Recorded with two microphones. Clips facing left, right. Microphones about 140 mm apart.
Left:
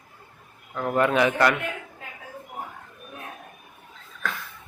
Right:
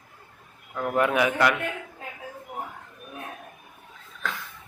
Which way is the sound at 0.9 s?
10° right (ahead or behind).